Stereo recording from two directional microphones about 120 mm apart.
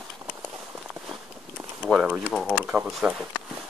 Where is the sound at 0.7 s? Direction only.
10° right (ahead or behind).